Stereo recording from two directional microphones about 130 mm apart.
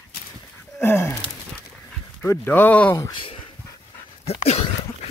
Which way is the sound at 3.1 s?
40° left (ahead or behind).